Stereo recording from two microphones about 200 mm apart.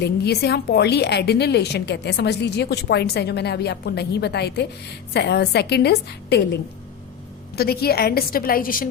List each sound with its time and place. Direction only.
0.0 s a woman's voice: 55° left (ahead or behind)